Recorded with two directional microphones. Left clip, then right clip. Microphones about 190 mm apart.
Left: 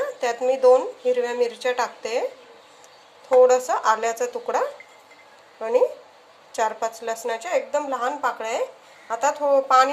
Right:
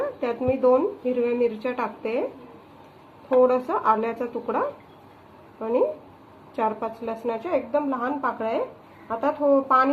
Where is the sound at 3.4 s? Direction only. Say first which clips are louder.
Left 4 dB; 50° left (ahead or behind).